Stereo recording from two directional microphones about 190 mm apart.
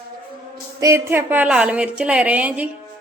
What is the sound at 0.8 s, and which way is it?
A woman's voice, 15° right (ahead or behind).